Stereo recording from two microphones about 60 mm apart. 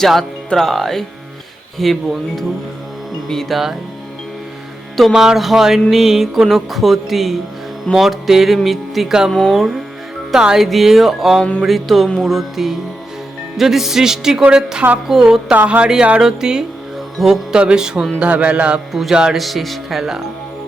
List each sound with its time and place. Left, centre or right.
0.0 s speech: centre
1.8 s music: centre
5.1 s music: centre
15.5 s speech: right
15.9 s music: centre
17.6 s music: centre
18.2 s speech: right
19.1 s music: centre
19.4 s music: centre